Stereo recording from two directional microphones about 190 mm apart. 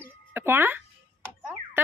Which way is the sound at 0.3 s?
10° right (ahead or behind).